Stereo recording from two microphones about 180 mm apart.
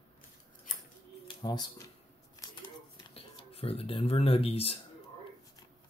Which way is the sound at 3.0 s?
30° left (ahead or behind).